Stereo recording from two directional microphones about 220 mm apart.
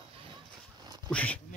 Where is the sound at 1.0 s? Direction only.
5° left (ahead or behind).